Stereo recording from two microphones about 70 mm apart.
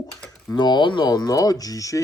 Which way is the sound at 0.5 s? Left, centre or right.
Left.